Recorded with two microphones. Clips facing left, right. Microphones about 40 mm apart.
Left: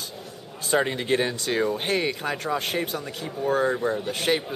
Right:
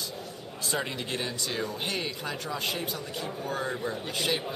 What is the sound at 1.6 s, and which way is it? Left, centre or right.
Speech, left.